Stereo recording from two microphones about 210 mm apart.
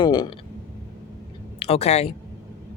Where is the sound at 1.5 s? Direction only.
30° left (ahead or behind).